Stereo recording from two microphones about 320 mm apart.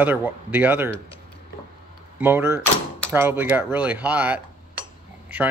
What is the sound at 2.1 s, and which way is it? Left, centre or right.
Speech, centre.